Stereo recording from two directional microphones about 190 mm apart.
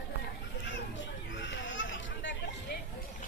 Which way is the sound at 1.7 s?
80° left.